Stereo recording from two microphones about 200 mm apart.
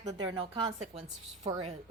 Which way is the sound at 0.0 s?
20° right (ahead or behind).